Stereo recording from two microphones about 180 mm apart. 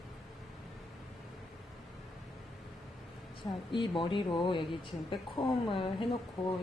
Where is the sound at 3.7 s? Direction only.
25° left (ahead or behind).